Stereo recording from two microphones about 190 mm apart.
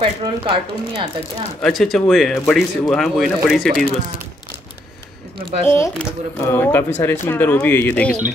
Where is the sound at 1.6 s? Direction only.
Centre (ahead or behind).